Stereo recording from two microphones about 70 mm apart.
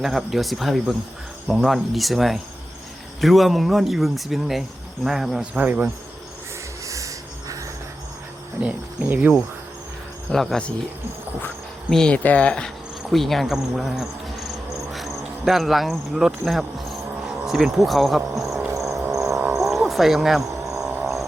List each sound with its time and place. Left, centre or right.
0.0 s speech: centre
5.4 s speech: right
6.8 s a sound: right
8.6 s speech: centre
10.3 s speech: centre
11.9 s speech: centre
12.1 s speech: left
13.1 s speech: centre
18.9 s a sound: centre